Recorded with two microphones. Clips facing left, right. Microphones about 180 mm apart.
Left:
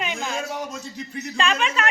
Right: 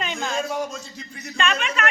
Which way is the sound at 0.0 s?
10° left (ahead or behind).